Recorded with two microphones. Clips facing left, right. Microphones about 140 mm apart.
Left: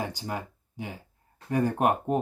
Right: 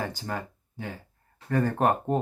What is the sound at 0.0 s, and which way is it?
Speech, 15° left (ahead or behind).